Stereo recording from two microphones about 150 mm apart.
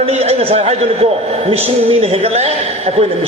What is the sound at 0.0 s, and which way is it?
A woman's voice, 40° right (ahead or behind).